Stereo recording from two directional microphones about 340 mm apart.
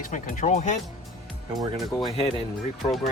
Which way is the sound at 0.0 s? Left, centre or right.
Left.